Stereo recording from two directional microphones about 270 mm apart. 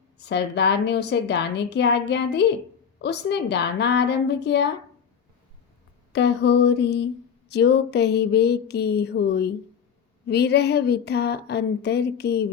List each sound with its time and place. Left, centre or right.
0.2 s speech: left
6.1 s speech: left